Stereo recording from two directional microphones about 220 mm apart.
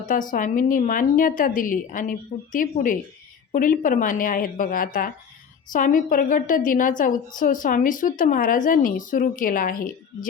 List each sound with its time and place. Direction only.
0.0 s a woman's voice: 35° left (ahead or behind)